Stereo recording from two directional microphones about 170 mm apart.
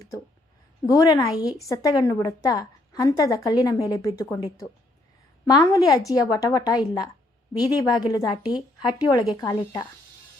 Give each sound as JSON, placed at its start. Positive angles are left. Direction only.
{"t": 0.9, "sound": "a woman's voice", "side_deg": 20}